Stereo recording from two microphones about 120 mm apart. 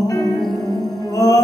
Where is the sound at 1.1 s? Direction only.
30° left (ahead or behind).